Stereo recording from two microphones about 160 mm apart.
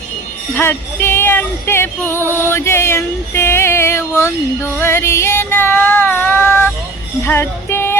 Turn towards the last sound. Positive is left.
turn(degrees=15)  # may be behind; listen again after turning